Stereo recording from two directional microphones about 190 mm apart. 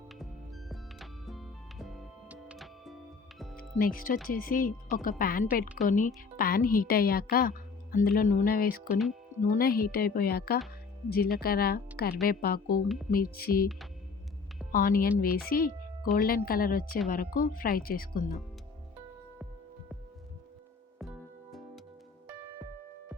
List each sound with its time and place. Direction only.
0.7 s music: centre (ahead or behind)
3.8 s speech: 50° left (ahead or behind)
8.9 s speech: centre (ahead or behind)
9.5 s speech: 50° left (ahead or behind)
14.7 s a woman's voice: 50° left (ahead or behind)
21.0 s music: centre (ahead or behind)